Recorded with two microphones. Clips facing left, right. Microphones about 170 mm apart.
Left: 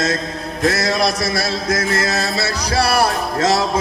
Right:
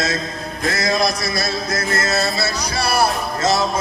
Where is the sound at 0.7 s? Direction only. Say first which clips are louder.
Left 1 dB; 75° left (ahead or behind).